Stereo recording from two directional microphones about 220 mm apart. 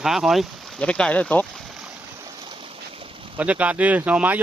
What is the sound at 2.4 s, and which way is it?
Boat, 25° right (ahead or behind).